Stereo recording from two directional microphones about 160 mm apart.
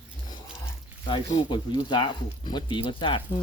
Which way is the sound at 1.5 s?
30° left (ahead or behind).